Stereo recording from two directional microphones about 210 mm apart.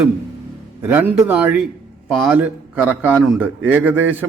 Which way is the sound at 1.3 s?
5° right (ahead or behind).